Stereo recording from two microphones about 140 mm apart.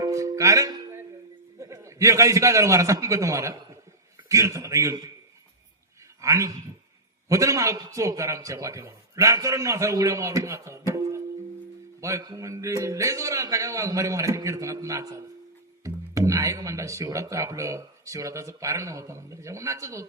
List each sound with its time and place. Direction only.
0.0 s music: 25° right (ahead or behind)
1.5 s a man's voice: 20° right (ahead or behind)
6.2 s a man's voice: 25° right (ahead or behind)